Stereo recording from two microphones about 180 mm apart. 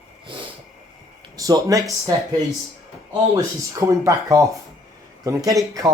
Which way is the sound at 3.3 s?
15° right (ahead or behind).